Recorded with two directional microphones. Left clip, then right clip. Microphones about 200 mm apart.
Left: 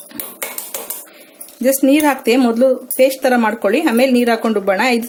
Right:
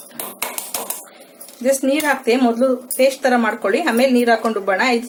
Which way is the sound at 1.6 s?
45° left (ahead or behind).